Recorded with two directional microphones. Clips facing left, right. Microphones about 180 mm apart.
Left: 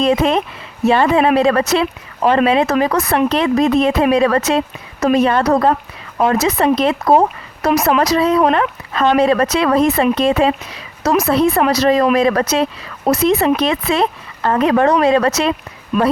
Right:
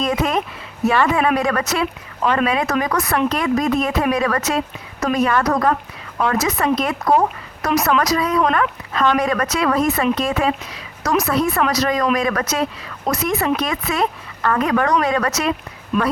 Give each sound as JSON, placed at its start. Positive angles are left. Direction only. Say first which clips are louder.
{"t": 0.0, "sound": "a woman's voice", "louder": "left 5 dB", "side_deg": 25}